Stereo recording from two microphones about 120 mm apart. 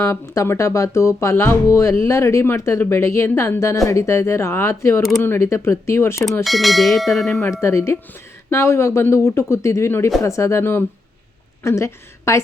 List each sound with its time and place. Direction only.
0.0 s speech: 20° left (ahead or behind)
6.4 s bell: centre (ahead or behind)
7.6 s a woman's voice: 25° left (ahead or behind)